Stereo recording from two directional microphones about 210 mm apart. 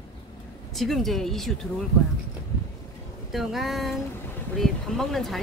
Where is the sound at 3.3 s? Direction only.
Centre (ahead or behind).